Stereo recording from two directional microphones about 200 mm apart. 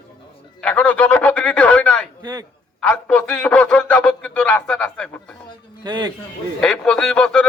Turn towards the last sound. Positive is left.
turn(degrees=5)  # may be behind; listen again after turning